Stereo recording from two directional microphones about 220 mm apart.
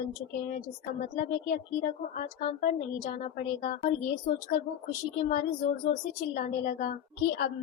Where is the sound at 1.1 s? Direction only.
35° left (ahead or behind).